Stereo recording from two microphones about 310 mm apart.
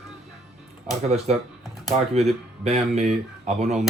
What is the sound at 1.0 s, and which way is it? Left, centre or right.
Speech, centre.